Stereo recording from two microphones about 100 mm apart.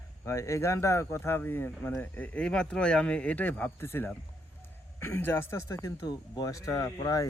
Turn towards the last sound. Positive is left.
turn(degrees=35)  # may be behind; listen again after turning